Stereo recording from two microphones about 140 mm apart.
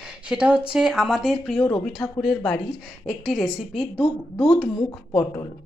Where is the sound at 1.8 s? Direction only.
Centre (ahead or behind).